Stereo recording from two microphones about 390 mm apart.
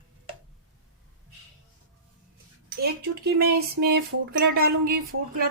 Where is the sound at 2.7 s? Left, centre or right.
Right.